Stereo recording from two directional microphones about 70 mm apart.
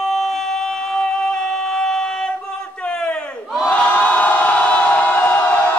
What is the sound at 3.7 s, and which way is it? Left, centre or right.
Crowd, left.